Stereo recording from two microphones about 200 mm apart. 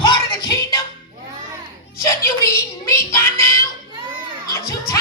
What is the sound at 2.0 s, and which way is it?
Speech, 15° left (ahead or behind).